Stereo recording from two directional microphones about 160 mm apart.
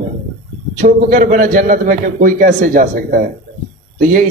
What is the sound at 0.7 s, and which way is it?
A man's voice, 60° right (ahead or behind).